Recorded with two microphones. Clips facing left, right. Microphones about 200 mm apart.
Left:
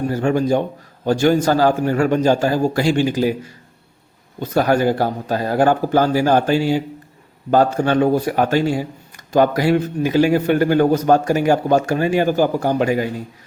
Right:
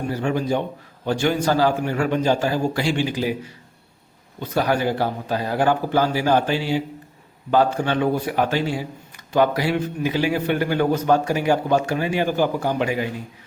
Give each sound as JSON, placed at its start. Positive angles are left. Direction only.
{"t": 0.1, "sound": "speech", "side_deg": 45}